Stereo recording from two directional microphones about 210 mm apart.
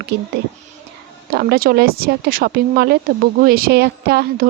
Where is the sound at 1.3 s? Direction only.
45° right (ahead or behind).